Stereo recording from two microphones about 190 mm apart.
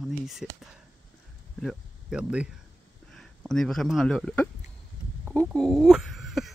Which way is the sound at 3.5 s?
Centre (ahead or behind).